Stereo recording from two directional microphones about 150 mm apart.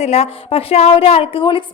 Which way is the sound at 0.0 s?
45° left (ahead or behind).